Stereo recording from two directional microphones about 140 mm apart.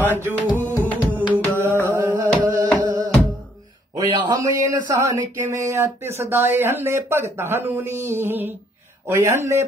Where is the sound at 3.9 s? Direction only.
30° right (ahead or behind).